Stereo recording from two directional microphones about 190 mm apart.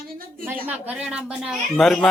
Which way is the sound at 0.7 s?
10° right (ahead or behind).